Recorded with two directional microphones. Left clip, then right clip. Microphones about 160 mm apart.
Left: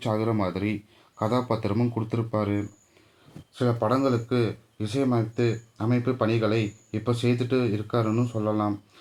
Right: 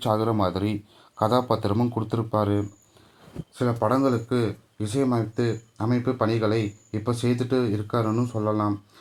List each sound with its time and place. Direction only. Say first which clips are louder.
0.0 s speech: right 3 dB; 35° right (ahead or behind)